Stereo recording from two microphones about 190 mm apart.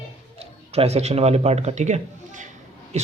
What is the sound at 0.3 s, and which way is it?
A man's voice, 30° right (ahead or behind).